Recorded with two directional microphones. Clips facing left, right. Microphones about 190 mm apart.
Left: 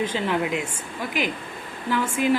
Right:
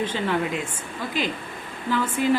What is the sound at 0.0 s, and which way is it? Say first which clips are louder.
Speech: even; 10° left (ahead or behind).